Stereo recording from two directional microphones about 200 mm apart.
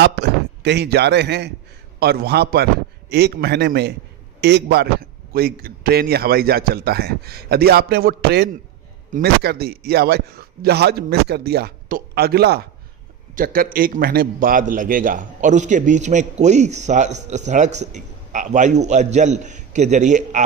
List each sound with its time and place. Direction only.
0.0 s a man's voice: 55° right (ahead or behind); by 20.4 s 35° right (ahead or behind)